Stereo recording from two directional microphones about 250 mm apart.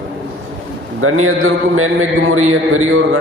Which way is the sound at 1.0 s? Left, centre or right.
Right.